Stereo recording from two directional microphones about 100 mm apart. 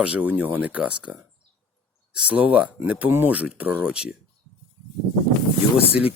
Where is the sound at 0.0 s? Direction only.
15° right (ahead or behind).